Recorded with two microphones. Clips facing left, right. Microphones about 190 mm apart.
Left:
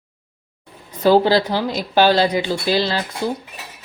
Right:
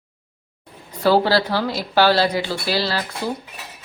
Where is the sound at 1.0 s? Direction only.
20° left (ahead or behind).